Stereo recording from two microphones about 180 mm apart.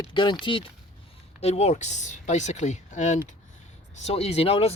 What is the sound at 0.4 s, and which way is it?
Speech, 30° left (ahead or behind).